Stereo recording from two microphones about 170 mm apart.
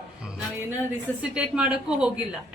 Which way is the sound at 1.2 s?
5° right (ahead or behind).